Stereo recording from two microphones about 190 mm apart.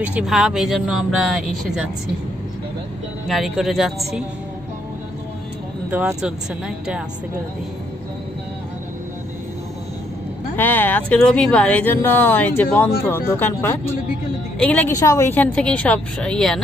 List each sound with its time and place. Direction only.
0.0 s speech: 5° right (ahead or behind)
3.3 s speech: centre (ahead or behind)
5.9 s speech: 10° right (ahead or behind)
10.5 s speech: 10° left (ahead or behind)